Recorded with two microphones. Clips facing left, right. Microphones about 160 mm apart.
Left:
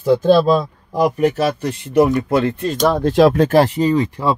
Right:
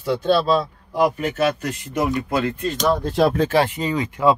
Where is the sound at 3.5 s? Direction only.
40° left (ahead or behind).